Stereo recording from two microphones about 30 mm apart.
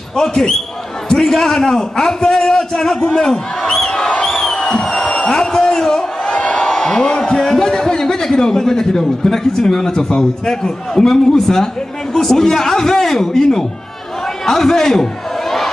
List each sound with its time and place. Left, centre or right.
0.1 s speech: left
1.1 s a man's voice: centre
4.2 s music: centre
4.8 s a sound: centre
6.3 s crowd: left
6.6 s a sound: centre
7.0 s a man's voice: left
7.3 s a sound: centre
7.6 s a man's voice: left
9.8 s a man's voice: left